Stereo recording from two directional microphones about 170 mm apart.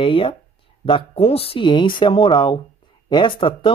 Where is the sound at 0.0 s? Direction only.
30° left (ahead or behind).